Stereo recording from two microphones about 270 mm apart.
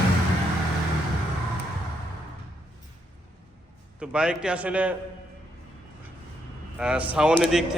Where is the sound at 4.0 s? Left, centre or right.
Centre.